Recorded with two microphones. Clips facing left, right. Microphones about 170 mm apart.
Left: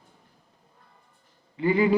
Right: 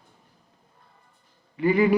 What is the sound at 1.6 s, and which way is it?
Speech, 25° left (ahead or behind).